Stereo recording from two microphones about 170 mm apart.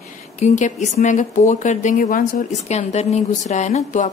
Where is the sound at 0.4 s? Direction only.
45° left (ahead or behind).